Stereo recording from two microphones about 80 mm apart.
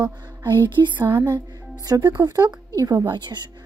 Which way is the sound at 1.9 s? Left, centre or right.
Right.